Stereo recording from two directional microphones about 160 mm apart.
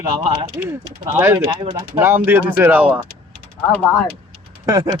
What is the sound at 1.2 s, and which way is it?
Speech, 15° right (ahead or behind).